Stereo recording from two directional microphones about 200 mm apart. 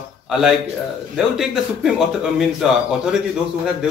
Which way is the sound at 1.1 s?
Centre (ahead or behind).